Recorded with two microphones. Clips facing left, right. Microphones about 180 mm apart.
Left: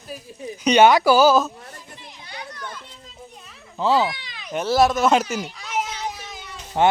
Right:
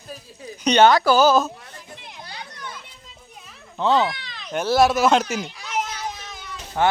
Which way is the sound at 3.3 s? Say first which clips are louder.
Right 1 dB; centre (ahead or behind).